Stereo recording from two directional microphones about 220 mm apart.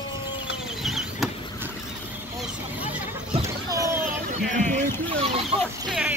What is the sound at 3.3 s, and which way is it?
Chicken, 15° right (ahead or behind).